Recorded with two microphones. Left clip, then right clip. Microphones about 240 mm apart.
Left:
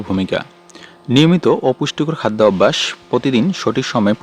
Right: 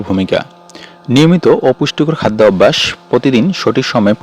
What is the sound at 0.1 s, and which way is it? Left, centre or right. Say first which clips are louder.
Speech: right 5 dB; right.